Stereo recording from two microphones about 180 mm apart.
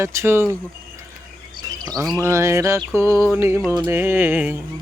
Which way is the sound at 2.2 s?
15° right (ahead or behind).